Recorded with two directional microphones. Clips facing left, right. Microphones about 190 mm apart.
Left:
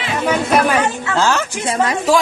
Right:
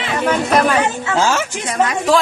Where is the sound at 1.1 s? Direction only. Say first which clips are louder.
Even; 10° right (ahead or behind).